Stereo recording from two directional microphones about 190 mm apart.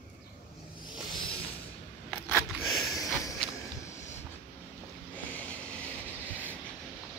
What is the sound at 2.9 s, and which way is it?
Sniff, 15° left (ahead or behind).